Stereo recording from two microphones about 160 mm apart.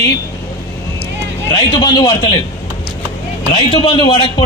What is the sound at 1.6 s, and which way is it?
Speech, 25° left (ahead or behind).